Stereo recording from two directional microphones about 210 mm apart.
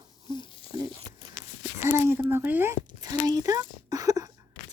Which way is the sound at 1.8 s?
10° right (ahead or behind).